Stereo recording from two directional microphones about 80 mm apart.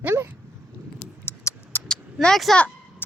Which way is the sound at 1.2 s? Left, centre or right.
Left.